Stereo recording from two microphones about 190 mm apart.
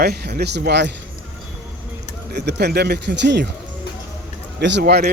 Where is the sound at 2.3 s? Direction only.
60° right (ahead or behind).